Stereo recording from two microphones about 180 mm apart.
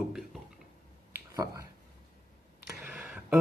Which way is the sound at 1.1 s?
20° right (ahead or behind).